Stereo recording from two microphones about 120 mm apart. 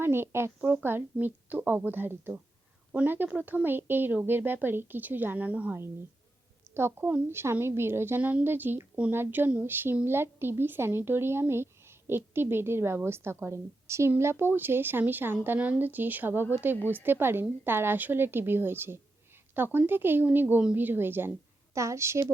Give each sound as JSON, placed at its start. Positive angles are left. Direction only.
{"t": 0.0, "sound": "a woman's voice", "side_deg": -20}